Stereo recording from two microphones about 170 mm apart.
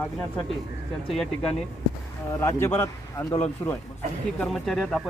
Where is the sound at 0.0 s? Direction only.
5° left (ahead or behind).